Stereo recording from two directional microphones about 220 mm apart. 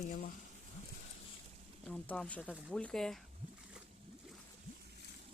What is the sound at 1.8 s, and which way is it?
Speech, 5° left (ahead or behind).